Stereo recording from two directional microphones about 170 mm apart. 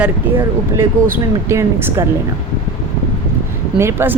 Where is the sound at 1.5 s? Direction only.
15° right (ahead or behind).